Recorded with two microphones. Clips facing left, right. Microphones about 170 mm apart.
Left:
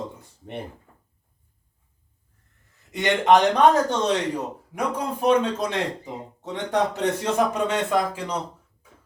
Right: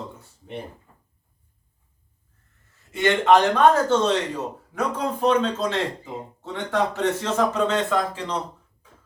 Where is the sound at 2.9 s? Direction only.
15° left (ahead or behind).